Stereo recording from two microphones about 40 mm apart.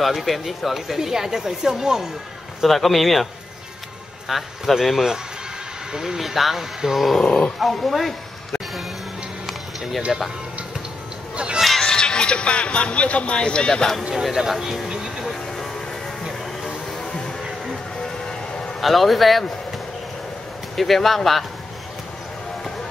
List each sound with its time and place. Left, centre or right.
0.0 s speech: centre
2.6 s a man's voice: centre
4.3 s a man's voice: centre
7.2 s speech: left
7.6 s a man's voice: centre
10.1 s a man's voice: centre
11.3 s speech: right
11.8 s speech: centre
14.1 s speech: centre
14.9 s vehicle: centre
18.0 s train: centre
18.8 s a man's voice: centre
20.7 s a man's voice: centre